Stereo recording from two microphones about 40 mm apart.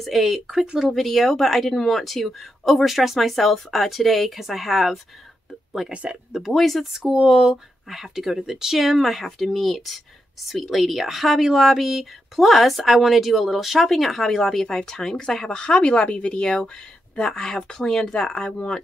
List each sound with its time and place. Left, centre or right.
0.0 s speech: centre
6.5 s speech: centre
6.9 s speech: centre
7.9 s speech: centre
15.4 s a woman's voice: left